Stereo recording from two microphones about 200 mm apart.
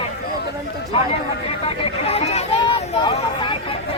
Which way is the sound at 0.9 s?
25° left (ahead or behind).